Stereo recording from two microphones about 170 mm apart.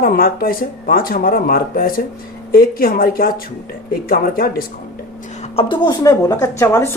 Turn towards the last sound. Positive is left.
turn(degrees=15)  # may be behind; listen again after turning